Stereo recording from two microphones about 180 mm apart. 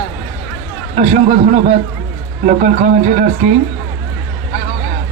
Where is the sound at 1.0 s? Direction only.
40° right (ahead or behind).